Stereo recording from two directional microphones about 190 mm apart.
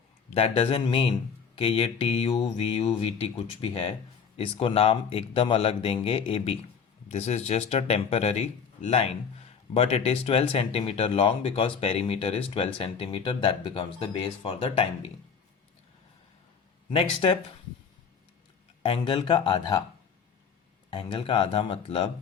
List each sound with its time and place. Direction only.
0.3 s speech: 30° left (ahead or behind)
16.9 s speech: 30° left (ahead or behind)
18.8 s speech: 30° left (ahead or behind)
20.9 s speech: 25° left (ahead or behind)